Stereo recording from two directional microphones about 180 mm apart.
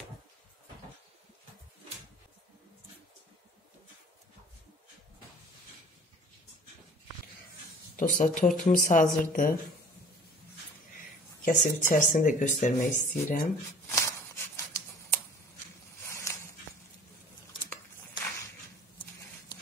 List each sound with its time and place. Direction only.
7.9 s speech: 45° left (ahead or behind)
11.0 s speech: 50° left (ahead or behind)
13.8 s shuffling cards: 15° left (ahead or behind)
16.1 s a sound: 15° left (ahead or behind)